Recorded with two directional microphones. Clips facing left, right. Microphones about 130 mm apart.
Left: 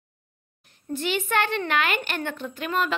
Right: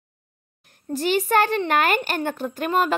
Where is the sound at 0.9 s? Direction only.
40° right (ahead or behind).